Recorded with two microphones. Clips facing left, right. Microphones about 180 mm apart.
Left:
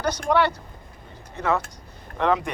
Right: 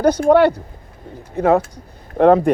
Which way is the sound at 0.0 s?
55° right (ahead or behind).